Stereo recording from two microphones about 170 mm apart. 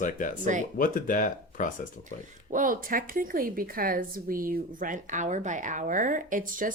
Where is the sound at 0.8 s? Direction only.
55° left (ahead or behind).